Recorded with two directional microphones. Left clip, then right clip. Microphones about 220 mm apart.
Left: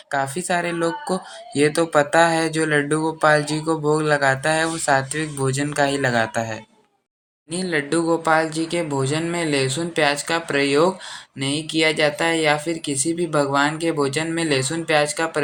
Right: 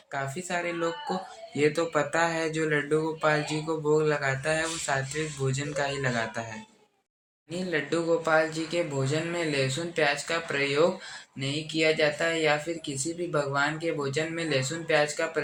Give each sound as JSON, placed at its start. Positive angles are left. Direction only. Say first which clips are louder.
{"t": 0.1, "sound": "speech", "louder": "left 10 dB", "side_deg": 45}